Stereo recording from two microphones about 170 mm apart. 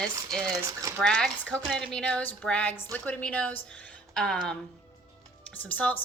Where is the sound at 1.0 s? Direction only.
5° left (ahead or behind).